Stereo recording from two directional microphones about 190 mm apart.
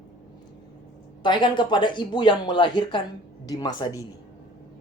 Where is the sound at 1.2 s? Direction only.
25° left (ahead or behind).